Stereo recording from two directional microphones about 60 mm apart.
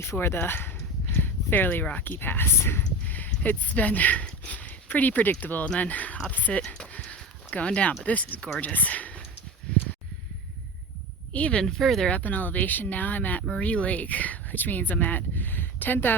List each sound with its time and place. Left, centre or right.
0.0 s speech: left
6.7 s a sound: centre
7.5 s speech: left
9.7 s a sound: centre
11.3 s speech: left
11.6 s speech: centre
12.0 s speech: left